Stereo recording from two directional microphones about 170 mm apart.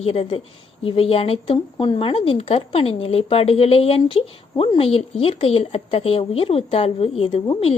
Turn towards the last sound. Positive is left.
turn(degrees=35)  # may be behind; listen again after turning